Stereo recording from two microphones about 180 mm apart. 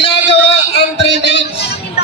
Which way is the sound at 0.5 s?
75° left (ahead or behind).